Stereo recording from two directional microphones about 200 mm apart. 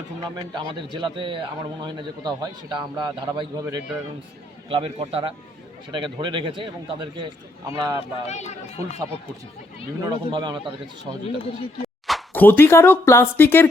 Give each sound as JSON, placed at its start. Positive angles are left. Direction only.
{"t": 0.3, "sound": "a man's voice", "side_deg": -20}
{"t": 4.7, "sound": "a man's voice", "side_deg": -30}
{"t": 8.3, "sound": "speech", "side_deg": 35}
{"t": 10.0, "sound": "a man's voice", "side_deg": -20}
{"t": 12.0, "sound": "speech", "side_deg": 5}